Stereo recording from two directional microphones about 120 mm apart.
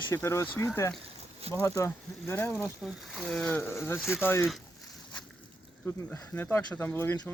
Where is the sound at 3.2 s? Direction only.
5° left (ahead or behind).